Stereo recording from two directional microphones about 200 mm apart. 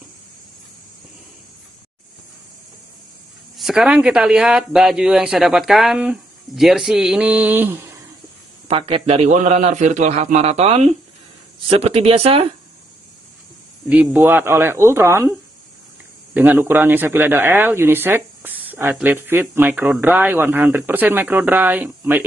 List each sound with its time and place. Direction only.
3.5 s speech: centre (ahead or behind)
8.6 s a man's voice: 25° right (ahead or behind)
13.8 s speech: 10° right (ahead or behind)
16.3 s speech: 10° right (ahead or behind)